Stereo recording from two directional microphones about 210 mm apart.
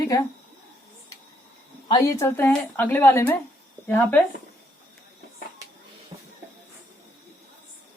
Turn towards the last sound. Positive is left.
turn(degrees=-15)  # may be behind; listen again after turning